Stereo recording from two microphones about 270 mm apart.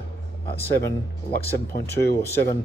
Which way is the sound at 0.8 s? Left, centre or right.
Left.